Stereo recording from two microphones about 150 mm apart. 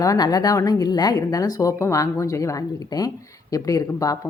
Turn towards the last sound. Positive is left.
turn(degrees=20)  # may be behind; listen again after turning